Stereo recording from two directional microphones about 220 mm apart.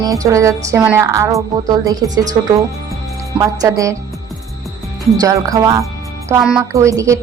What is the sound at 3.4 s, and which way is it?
Speech, 15° right (ahead or behind).